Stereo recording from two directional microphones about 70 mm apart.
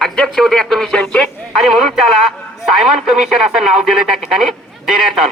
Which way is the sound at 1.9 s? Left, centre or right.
Centre.